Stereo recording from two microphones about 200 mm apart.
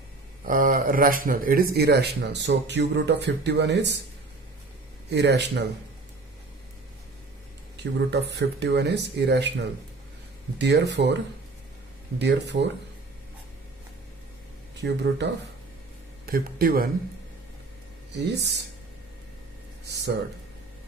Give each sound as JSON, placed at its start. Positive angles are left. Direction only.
{"t": 0.4, "sound": "speech", "side_deg": -45}
{"t": 5.1, "sound": "speech", "side_deg": -60}
{"t": 7.9, "sound": "speech", "side_deg": -55}
{"t": 10.6, "sound": "speech", "side_deg": -60}
{"t": 12.2, "sound": "speech", "side_deg": -60}
{"t": 14.8, "sound": "speech", "side_deg": -60}
{"t": 16.2, "sound": "speech", "side_deg": -50}
{"t": 18.3, "sound": "speech", "side_deg": -60}
{"t": 19.8, "sound": "speech", "side_deg": -55}